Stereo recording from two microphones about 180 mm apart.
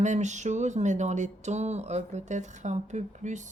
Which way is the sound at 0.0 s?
40° right (ahead or behind).